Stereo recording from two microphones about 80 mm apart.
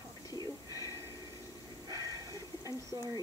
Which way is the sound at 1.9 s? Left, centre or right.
Right.